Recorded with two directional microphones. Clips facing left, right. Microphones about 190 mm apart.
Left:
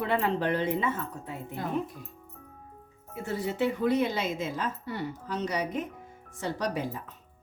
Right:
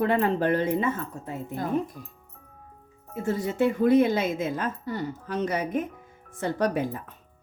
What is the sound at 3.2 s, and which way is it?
A woman's voice, 50° right (ahead or behind).